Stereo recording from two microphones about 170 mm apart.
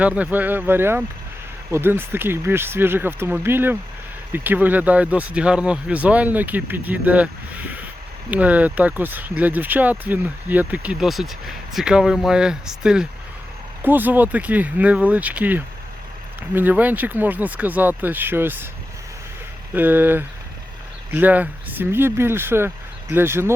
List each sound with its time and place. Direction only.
0.0 s speech: 10° right (ahead or behind)
8.3 s speech: 10° right (ahead or behind)
19.7 s speech: 10° right (ahead or behind)